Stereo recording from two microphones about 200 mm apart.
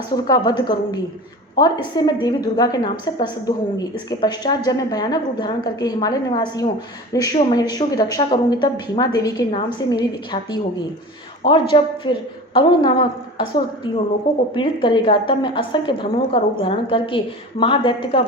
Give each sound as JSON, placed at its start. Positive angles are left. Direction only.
{"t": 0.1, "sound": "a woman's voice", "side_deg": 20}